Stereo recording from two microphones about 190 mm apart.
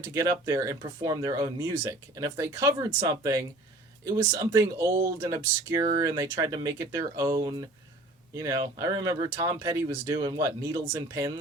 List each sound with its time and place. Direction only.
0.0 s speech: 20° right (ahead or behind)